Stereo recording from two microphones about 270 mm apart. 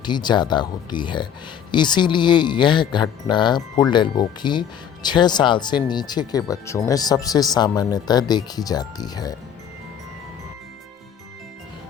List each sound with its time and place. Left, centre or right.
0.0 s speech: centre